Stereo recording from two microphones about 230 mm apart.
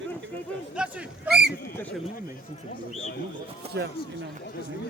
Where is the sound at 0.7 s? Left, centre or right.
Centre.